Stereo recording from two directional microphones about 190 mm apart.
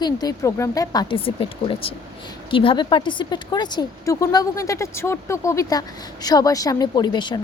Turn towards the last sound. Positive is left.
turn(degrees=20)  # may be behind; listen again after turning